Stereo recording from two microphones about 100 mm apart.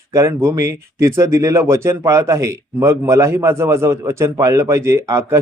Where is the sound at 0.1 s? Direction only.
30° right (ahead or behind).